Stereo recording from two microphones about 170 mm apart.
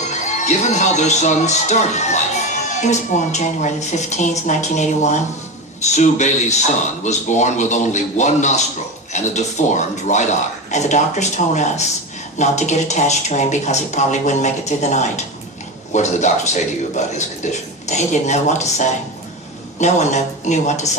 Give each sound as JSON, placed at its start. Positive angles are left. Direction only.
{"t": 0.1, "sound": "speech", "side_deg": 45}